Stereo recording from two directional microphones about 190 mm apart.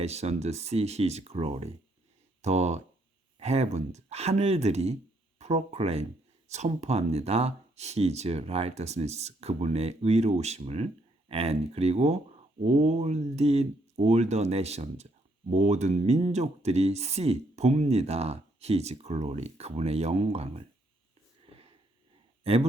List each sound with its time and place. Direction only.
0.0 s speech: 35° right (ahead or behind)
22.5 s speech: 30° right (ahead or behind)